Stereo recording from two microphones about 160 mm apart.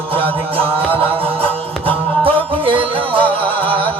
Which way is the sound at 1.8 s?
35° right (ahead or behind).